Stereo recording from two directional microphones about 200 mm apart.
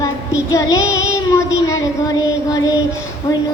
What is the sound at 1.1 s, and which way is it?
Child singing, 15° left (ahead or behind).